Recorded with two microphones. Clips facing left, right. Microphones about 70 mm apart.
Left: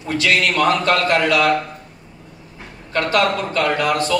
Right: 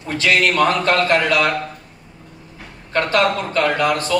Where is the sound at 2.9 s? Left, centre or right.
Right.